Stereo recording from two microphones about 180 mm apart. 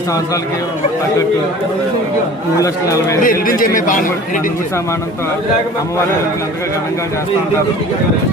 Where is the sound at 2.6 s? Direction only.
15° left (ahead or behind).